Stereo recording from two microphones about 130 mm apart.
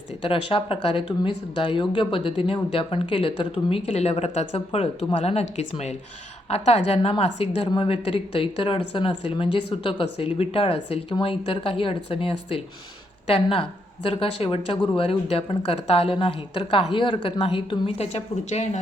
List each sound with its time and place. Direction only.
0.3 s speech: 45° left (ahead or behind); by 18.8 s 60° left (ahead or behind)